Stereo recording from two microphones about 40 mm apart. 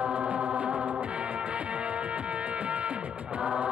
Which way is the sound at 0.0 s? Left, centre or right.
Right.